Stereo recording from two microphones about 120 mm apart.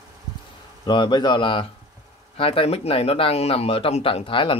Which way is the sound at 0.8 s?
40° left (ahead or behind).